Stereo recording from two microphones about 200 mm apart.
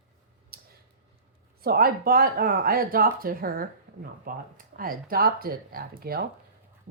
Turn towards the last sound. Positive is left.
turn(degrees=-50)  # may be behind; listen again after turning